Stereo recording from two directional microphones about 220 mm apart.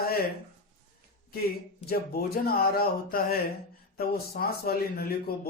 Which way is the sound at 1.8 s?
45° left (ahead or behind).